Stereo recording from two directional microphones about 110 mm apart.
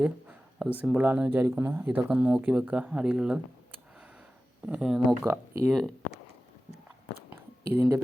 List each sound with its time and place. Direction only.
0.0 s speech: 10° right (ahead or behind)
4.6 s speech: 10° right (ahead or behind)
5.2 s speech: 25° right (ahead or behind)
5.6 s speech: centre (ahead or behind)
7.3 s a sound: 20° right (ahead or behind)